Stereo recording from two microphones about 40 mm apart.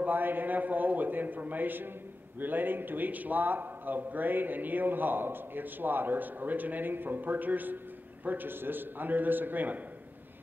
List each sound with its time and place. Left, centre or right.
0.0 s a man's voice: right